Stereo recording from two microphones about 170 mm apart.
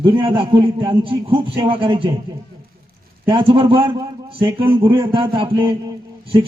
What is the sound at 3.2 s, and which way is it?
A man's voice, 30° right (ahead or behind).